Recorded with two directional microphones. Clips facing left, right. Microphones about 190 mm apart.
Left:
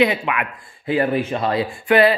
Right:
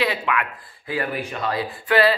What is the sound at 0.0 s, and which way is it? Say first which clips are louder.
A man's voice: left 5 dB; 20° left (ahead or behind).